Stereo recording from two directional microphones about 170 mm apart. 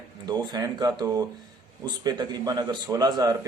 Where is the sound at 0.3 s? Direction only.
20° right (ahead or behind).